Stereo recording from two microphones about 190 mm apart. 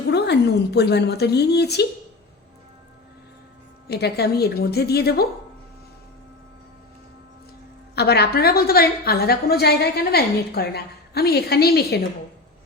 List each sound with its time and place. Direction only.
0.1 s a woman's voice: 60° left (ahead or behind)
3.8 s a woman's voice: 60° left (ahead or behind)
7.9 s a woman's voice: 60° left (ahead or behind)